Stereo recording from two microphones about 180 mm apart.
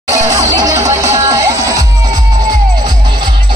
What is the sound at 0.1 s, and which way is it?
Music, 20° right (ahead or behind).